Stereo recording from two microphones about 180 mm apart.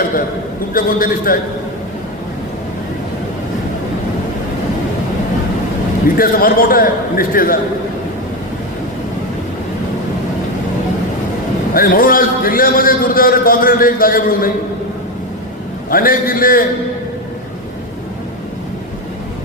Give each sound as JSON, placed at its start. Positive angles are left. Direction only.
{"t": 0.7, "sound": "a man's voice", "side_deg": 50}
{"t": 6.1, "sound": "a man's voice", "side_deg": 55}
{"t": 11.7, "sound": "a man's voice", "side_deg": 50}
{"t": 15.9, "sound": "a man's voice", "side_deg": 55}